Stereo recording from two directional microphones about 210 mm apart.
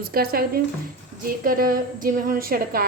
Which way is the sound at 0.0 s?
45° right (ahead or behind).